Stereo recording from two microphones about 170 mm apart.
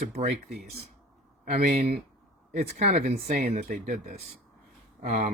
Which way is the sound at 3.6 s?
55° right (ahead or behind).